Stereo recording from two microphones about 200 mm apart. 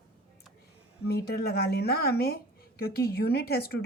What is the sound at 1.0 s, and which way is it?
A woman's voice, 50° left (ahead or behind).